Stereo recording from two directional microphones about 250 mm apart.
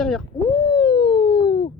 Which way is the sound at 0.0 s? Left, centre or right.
Centre.